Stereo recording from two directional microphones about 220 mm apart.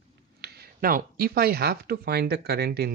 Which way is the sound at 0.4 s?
45° right (ahead or behind).